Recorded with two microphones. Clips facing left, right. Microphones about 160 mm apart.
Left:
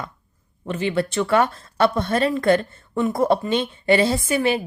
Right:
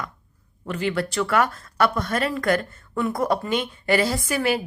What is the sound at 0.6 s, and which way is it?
Speech, 25° left (ahead or behind).